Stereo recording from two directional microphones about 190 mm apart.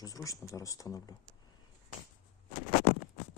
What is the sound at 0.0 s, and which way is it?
Speech, 20° left (ahead or behind).